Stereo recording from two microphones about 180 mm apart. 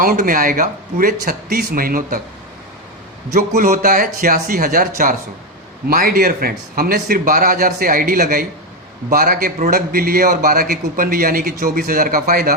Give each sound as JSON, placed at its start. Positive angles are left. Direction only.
{"t": 0.0, "sound": "a man's voice", "side_deg": -50}
{"t": 3.3, "sound": "a man's voice", "side_deg": -50}